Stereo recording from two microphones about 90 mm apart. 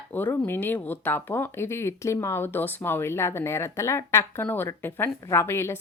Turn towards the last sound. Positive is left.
turn(degrees=25)  # may be behind; listen again after turning